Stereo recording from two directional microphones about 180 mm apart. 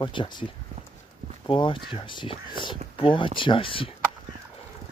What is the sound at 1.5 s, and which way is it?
Speech, 30° left (ahead or behind).